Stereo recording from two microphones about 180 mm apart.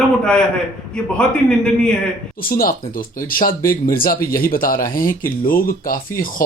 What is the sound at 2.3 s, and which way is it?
Speech, 55° left (ahead or behind).